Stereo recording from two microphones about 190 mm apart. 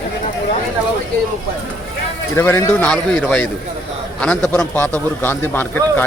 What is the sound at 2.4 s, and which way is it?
A man's voice, 10° left (ahead or behind).